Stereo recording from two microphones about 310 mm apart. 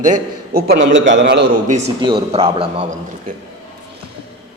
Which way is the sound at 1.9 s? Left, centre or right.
Centre.